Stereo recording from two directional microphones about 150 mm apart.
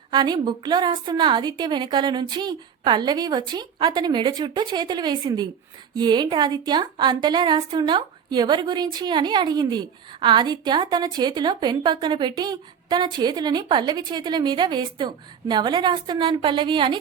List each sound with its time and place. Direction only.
0.1 s a woman's voice: 30° right (ahead or behind)